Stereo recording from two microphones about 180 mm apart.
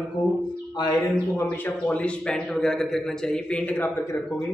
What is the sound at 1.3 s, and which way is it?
A man's voice, 10° left (ahead or behind).